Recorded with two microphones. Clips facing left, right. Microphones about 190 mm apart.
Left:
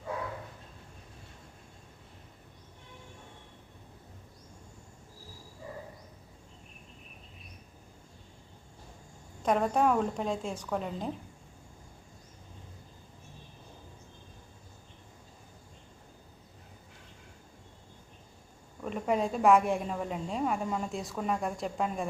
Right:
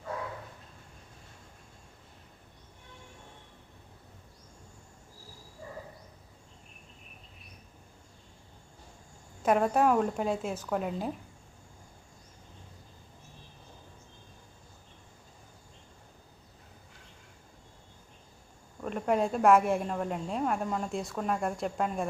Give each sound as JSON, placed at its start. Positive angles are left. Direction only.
{"t": 9.4, "sound": "a woman's voice", "side_deg": -5}
{"t": 18.8, "sound": "a woman's voice", "side_deg": 0}